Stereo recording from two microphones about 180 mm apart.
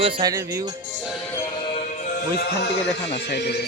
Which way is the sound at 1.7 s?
45° left (ahead or behind).